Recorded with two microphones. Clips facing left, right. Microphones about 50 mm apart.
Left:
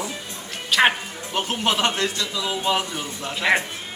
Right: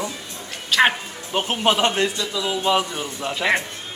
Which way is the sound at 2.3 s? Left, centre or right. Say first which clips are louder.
Right 3 dB; centre.